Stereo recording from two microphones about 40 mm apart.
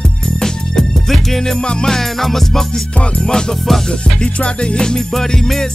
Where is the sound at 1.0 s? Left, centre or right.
Centre.